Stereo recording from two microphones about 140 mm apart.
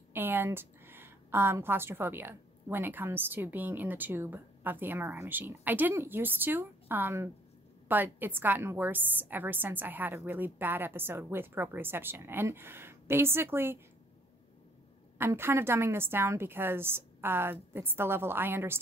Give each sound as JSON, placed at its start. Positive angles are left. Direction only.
{"t": 0.1, "sound": "a woman's voice", "side_deg": -15}
{"t": 15.1, "sound": "a woman's voice", "side_deg": -15}